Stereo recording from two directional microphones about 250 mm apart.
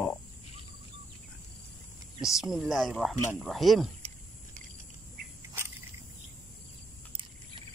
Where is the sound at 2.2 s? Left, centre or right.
Centre.